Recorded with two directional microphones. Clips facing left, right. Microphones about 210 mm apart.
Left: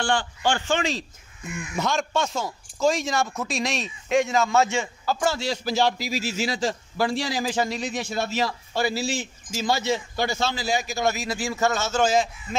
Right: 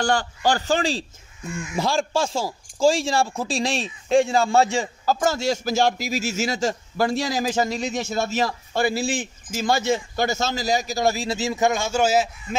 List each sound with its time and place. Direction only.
0.0 s a man's voice: 40° right (ahead or behind); by 12.5 s 5° right (ahead or behind)